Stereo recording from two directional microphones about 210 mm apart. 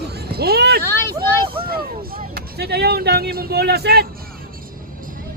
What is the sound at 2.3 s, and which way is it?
Speech, 50° right (ahead or behind).